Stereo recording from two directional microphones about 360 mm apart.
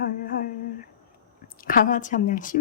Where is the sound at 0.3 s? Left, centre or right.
Left.